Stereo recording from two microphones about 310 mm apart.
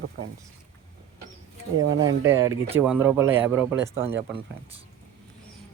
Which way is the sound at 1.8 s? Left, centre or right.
Right.